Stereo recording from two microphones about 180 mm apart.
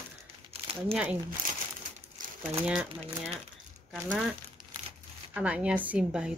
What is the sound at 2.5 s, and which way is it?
Speech, 10° right (ahead or behind).